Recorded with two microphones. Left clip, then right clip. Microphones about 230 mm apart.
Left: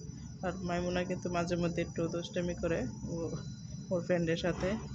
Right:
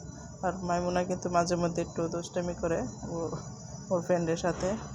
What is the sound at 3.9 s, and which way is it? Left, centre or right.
Speech, centre.